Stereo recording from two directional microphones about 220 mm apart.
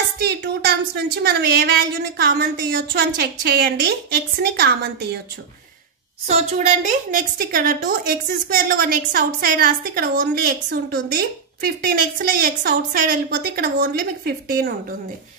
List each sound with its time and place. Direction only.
0.2 s a woman's voice: 45° right (ahead or behind)
6.2 s a woman's voice: 30° right (ahead or behind)